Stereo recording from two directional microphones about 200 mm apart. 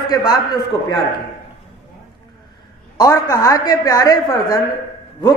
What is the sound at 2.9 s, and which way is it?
A woman's voice, 15° left (ahead or behind).